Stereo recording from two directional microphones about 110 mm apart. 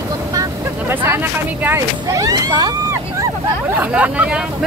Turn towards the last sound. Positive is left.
turn(degrees=-10)  # may be behind; listen again after turning